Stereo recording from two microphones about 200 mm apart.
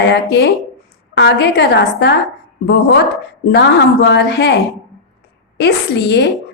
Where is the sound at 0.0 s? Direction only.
60° left (ahead or behind).